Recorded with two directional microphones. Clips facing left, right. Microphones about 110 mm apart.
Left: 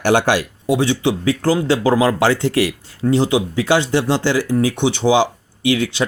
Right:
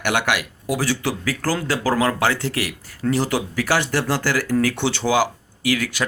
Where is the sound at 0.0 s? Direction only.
30° left (ahead or behind).